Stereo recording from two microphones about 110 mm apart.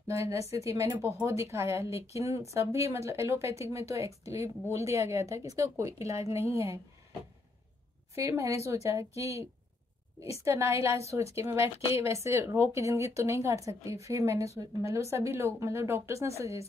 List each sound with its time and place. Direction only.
0.1 s speech: 25° right (ahead or behind)
8.1 s speech: 30° right (ahead or behind)